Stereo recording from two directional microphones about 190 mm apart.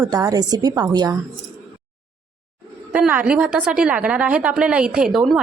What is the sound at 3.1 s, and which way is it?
A woman's voice, 5° right (ahead or behind).